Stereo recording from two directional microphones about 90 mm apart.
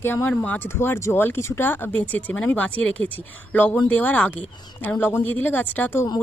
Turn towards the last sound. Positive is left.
turn(degrees=25)  # may be behind; listen again after turning